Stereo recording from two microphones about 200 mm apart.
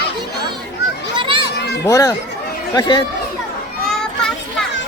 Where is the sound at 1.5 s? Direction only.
55° left (ahead or behind).